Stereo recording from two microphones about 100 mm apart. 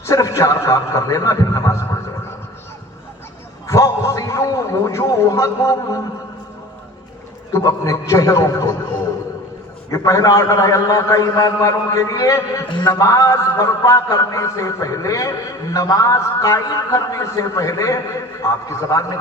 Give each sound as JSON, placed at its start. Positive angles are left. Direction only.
{"t": 0.0, "sound": "a sound", "side_deg": 35}
{"t": 3.7, "sound": "a man's voice", "side_deg": 30}
{"t": 7.5, "sound": "a man's voice", "side_deg": 35}
{"t": 9.9, "sound": "a man's voice", "side_deg": 35}
{"t": 12.6, "sound": "a man's voice", "side_deg": 50}